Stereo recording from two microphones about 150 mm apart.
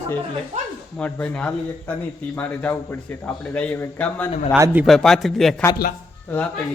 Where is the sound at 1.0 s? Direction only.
5° left (ahead or behind).